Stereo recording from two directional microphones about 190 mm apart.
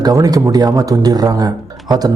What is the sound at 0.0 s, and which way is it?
A man's voice, 20° right (ahead or behind).